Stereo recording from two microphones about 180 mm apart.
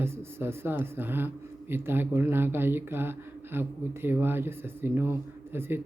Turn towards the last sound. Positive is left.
turn(degrees=-10)  # may be behind; listen again after turning